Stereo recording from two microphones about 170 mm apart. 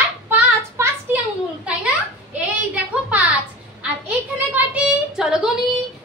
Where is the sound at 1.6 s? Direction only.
5° right (ahead or behind).